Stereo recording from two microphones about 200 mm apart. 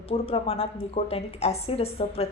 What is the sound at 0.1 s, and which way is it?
A woman's voice, 30° left (ahead or behind).